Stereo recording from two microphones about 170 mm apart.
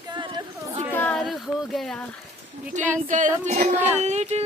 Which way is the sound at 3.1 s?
50° right (ahead or behind).